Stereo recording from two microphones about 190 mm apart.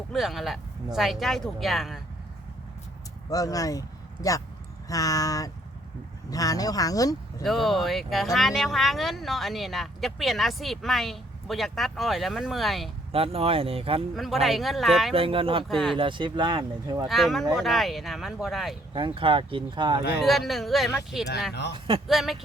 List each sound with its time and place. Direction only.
0.1 s speech: centre (ahead or behind)
3.2 s speech: 20° left (ahead or behind)
7.4 s speech: centre (ahead or behind)
13.1 s speech: 30° right (ahead or behind)
14.2 s speech: centre (ahead or behind)
15.1 s speech: 30° right (ahead or behind)
15.7 s speech: centre (ahead or behind)
16.0 s speech: 25° right (ahead or behind)
17.1 s speech: centre (ahead or behind)
18.9 s speech: 25° right (ahead or behind)
20.2 s speech: centre (ahead or behind)